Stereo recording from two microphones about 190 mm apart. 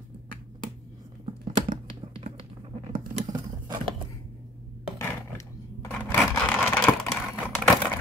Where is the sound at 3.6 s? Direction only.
25° right (ahead or behind).